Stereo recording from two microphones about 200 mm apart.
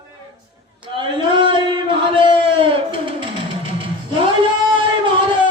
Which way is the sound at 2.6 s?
25° right (ahead or behind).